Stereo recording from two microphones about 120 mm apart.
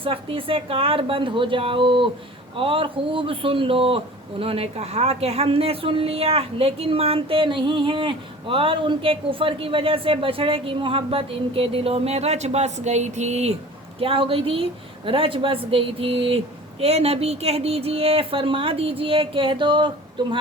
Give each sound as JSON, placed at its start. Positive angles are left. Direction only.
{"t": 0.0, "sound": "a man's voice", "side_deg": -50}
{"t": 14.0, "sound": "a man's voice", "side_deg": -50}